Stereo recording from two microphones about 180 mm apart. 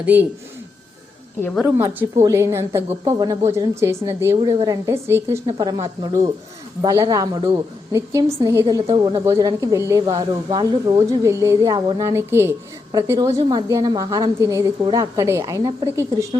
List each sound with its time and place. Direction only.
0.0 s a woman's voice: 10° right (ahead or behind)
1.4 s a woman's voice: 5° left (ahead or behind)
1.6 s a woman's voice: 10° right (ahead or behind)